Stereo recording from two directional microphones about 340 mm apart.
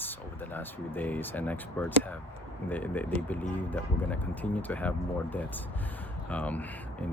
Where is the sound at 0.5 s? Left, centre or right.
Centre.